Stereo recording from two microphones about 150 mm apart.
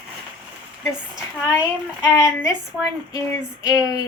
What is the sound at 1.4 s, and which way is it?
Speech, 10° right (ahead or behind).